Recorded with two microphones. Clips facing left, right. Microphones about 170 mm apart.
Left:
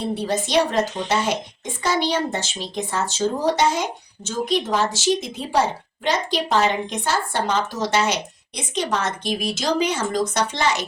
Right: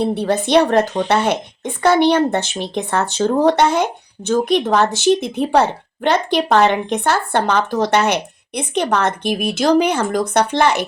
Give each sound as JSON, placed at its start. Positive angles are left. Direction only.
{"t": 0.0, "sound": "a woman's voice", "side_deg": -60}